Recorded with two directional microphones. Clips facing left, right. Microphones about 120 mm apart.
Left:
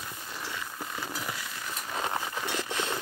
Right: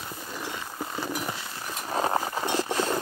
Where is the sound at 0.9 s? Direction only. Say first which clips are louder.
Right 5 dB; 30° right (ahead or behind).